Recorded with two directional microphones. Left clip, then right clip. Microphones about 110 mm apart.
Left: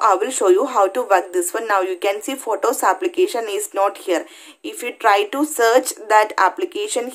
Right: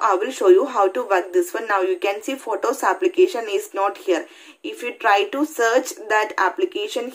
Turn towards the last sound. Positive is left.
turn(degrees=35)  # may be behind; listen again after turning